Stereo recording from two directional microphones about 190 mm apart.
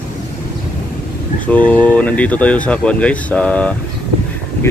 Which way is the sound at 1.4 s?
5° left (ahead or behind).